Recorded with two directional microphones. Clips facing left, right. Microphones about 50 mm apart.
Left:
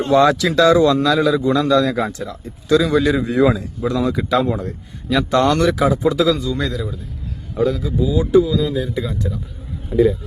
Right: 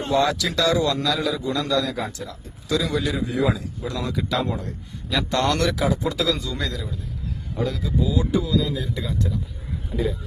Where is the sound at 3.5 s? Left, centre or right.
Left.